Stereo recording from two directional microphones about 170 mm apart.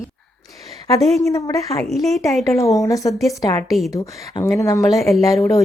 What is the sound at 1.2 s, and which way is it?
Speech, 20° left (ahead or behind).